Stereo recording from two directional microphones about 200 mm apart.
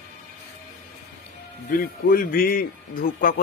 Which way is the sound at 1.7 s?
45° left (ahead or behind).